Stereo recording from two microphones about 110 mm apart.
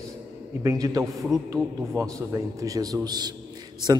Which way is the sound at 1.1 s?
Centre (ahead or behind).